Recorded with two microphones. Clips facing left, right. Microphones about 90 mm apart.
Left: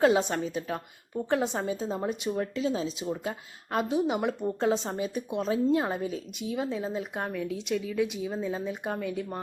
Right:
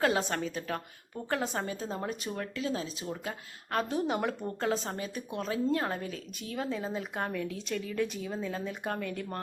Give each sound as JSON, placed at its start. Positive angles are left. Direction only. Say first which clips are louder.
{"t": 0.0, "sound": "a woman's voice", "louder": "left 5 dB", "side_deg": 20}
{"t": 4.6, "sound": "a woman's voice", "louder": "left 4 dB", "side_deg": 25}